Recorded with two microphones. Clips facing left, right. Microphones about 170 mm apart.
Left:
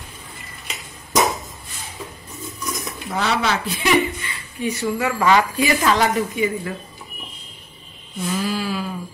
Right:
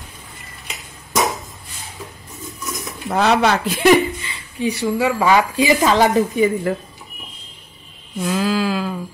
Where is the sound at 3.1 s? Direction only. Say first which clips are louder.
Right 6 dB; 55° right (ahead or behind).